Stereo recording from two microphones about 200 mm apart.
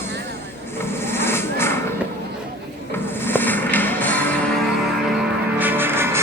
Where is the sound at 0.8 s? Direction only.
10° left (ahead or behind).